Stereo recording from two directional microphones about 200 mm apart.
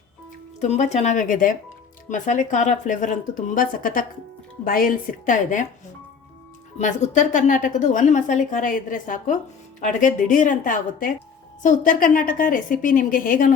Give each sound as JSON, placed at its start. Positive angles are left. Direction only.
{"t": 0.6, "sound": "a woman's voice", "side_deg": 35}
{"t": 6.7, "sound": "a woman's voice", "side_deg": 35}